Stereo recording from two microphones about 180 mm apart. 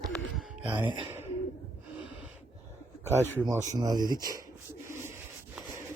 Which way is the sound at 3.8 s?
20° right (ahead or behind).